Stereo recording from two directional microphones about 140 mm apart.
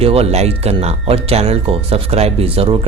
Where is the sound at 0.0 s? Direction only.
45° right (ahead or behind).